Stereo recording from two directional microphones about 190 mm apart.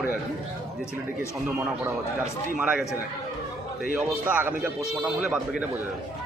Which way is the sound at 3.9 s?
10° right (ahead or behind).